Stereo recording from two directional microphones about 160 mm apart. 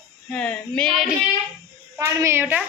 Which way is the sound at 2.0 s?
20° right (ahead or behind).